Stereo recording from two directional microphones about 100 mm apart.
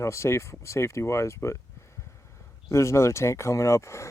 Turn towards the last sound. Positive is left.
turn(degrees=30)  # may be behind; listen again after turning